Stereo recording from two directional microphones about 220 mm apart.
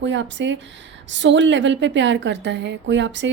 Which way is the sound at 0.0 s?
55° right (ahead or behind).